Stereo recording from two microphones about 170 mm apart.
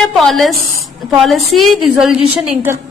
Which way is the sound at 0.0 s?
Centre (ahead or behind).